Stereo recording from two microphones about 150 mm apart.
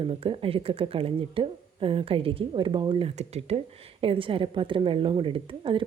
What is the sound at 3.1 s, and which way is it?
A woman's voice, 45° right (ahead or behind).